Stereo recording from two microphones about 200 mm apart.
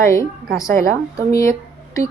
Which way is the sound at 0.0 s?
15° left (ahead or behind).